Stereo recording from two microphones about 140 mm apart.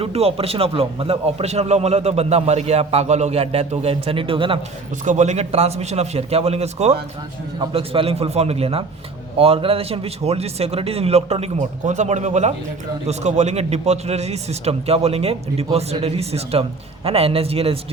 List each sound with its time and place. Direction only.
0.0 s a man's voice: 45° right (ahead or behind)
5.0 s a man's voice: 55° right (ahead or behind)